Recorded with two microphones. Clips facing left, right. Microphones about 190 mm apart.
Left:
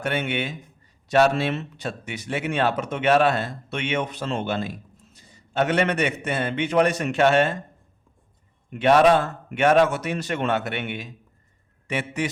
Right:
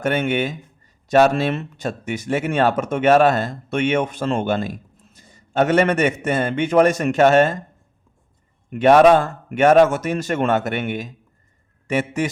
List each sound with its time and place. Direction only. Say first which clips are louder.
0.0 s speech: right 6 dB; 45° right (ahead or behind)
8.7 s speech: right 5 dB; 50° right (ahead or behind)